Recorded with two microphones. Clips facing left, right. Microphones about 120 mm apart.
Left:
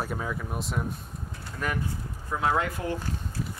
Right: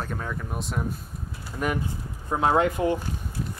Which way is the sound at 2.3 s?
30° right (ahead or behind).